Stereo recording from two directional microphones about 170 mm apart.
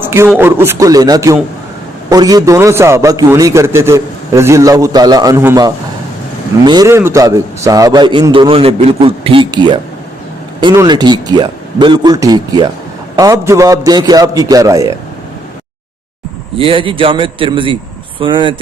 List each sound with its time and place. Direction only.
0.0 s a man's voice: 15° right (ahead or behind)
16.6 s a man's voice: 30° right (ahead or behind)